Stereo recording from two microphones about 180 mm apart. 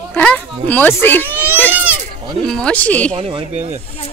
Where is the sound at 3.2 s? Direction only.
35° right (ahead or behind).